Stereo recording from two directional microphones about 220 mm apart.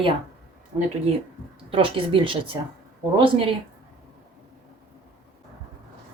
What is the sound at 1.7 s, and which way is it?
Speech, 25° right (ahead or behind).